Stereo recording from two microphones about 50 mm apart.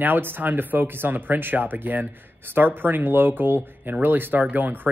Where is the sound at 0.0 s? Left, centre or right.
Right.